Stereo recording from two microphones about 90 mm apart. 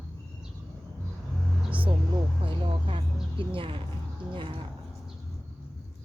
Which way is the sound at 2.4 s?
70° right (ahead or behind).